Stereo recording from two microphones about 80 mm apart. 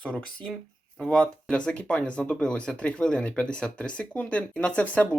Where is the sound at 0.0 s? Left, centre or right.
Centre.